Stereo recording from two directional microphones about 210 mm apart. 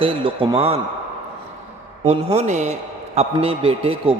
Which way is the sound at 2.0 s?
30° right (ahead or behind).